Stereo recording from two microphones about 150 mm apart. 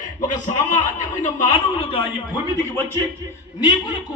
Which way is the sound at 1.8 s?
40° left (ahead or behind).